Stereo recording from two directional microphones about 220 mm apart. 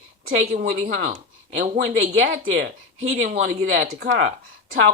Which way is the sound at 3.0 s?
65° right (ahead or behind).